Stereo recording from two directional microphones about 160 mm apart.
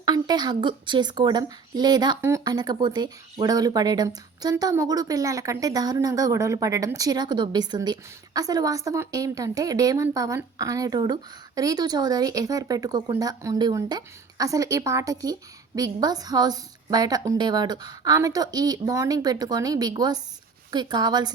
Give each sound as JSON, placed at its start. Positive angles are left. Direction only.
{"t": 0.0, "sound": "a woman's voice", "side_deg": -25}